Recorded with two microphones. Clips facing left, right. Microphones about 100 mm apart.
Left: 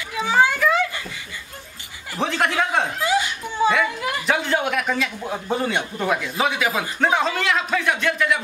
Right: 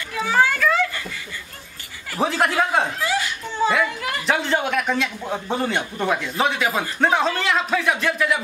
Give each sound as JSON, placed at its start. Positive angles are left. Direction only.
{"t": 0.3, "sound": "children playing", "side_deg": 15}
{"t": 2.1, "sound": "a man's voice", "side_deg": -5}
{"t": 3.0, "sound": "a sound", "side_deg": 20}
{"t": 4.3, "sound": "a man's voice", "side_deg": 0}